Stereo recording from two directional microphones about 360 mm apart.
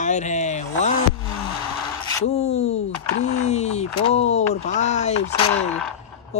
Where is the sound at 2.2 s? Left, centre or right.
Centre.